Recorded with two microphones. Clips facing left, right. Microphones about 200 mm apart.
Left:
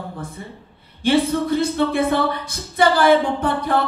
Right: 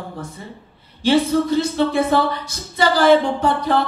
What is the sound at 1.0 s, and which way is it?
A woman's voice, 55° left (ahead or behind).